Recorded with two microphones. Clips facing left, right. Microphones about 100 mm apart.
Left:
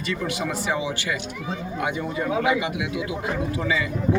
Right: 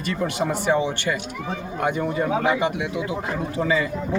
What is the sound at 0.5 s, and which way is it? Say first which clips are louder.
Speech: right 4 dB; 50° right (ahead or behind).